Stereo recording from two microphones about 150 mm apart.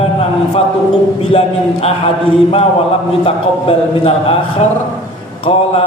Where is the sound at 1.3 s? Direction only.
45° left (ahead or behind).